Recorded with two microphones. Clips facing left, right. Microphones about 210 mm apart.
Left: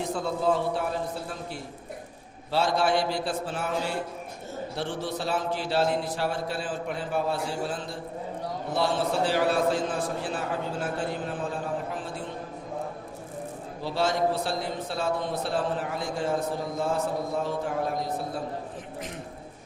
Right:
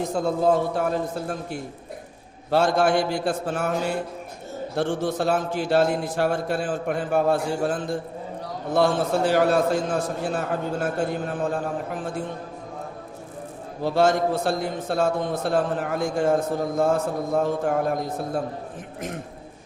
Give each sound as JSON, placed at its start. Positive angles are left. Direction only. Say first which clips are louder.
{"t": 0.0, "sound": "a man's voice", "louder": "right 5 dB", "side_deg": -45}
{"t": 13.8, "sound": "a man's voice", "louder": "right 6 dB", "side_deg": -50}